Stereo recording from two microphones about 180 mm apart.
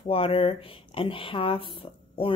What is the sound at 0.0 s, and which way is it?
Speech, 30° left (ahead or behind).